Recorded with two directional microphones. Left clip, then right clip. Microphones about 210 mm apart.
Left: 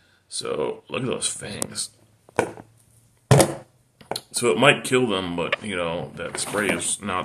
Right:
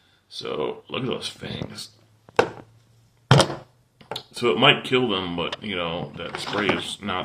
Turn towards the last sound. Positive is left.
turn(degrees=10)  # may be behind; listen again after turning